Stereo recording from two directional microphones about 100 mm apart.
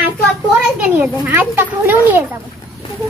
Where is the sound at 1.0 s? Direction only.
20° right (ahead or behind).